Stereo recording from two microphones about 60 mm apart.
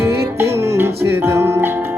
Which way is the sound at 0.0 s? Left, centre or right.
Right.